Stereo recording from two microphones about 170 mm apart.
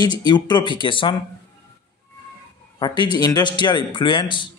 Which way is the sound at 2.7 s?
25° left (ahead or behind).